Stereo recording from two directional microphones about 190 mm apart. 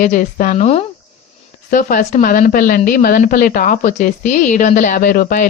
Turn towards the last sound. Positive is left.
turn(degrees=50)  # may be behind; listen again after turning